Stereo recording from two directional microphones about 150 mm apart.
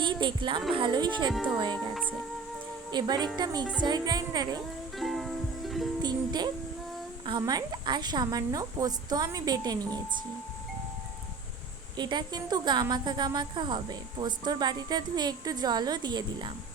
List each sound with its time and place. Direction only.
0.0 s speech: 30° right (ahead or behind)
1.3 s speech: centre (ahead or behind)
1.5 s speech: 30° right (ahead or behind)
2.9 s a woman's voice: 30° right (ahead or behind)
4.9 s ukulele: centre (ahead or behind)
6.0 s music: 30° right (ahead or behind)
7.3 s a woman's voice: 25° right (ahead or behind)
11.9 s a woman's voice: 30° right (ahead or behind)